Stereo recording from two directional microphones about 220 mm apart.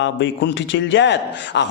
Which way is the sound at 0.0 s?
55° left (ahead or behind).